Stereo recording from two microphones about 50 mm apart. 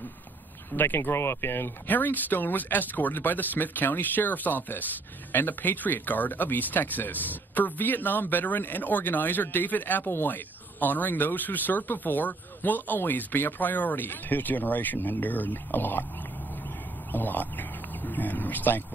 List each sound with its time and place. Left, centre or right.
0.7 s speech: left
1.9 s speech: left
17.1 s a sound: left